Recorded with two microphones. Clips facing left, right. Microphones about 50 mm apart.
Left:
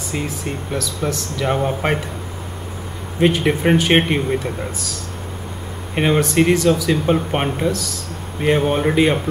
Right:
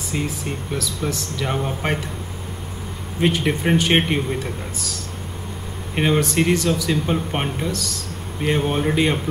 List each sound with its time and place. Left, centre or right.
0.1 s speech: centre
3.2 s speech: centre
5.9 s speech: centre
7.2 s a man's voice: centre
7.7 s a man's voice: centre